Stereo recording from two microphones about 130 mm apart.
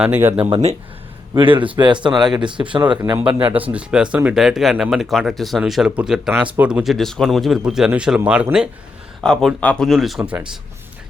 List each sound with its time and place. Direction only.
0.0 s speech: 15° right (ahead or behind)
1.4 s speech: 40° right (ahead or behind)
2.2 s speech: 5° right (ahead or behind)
2.5 s speech: 40° right (ahead or behind)
3.2 s speech: 15° right (ahead or behind)
6.8 s speech: centre (ahead or behind)
9.2 s speech: 5° left (ahead or behind)